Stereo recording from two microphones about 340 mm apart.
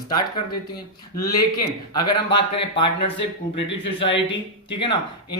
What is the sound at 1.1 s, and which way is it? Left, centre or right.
A man's voice, centre.